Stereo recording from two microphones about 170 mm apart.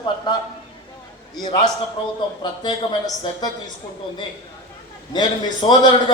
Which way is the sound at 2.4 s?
25° left (ahead or behind).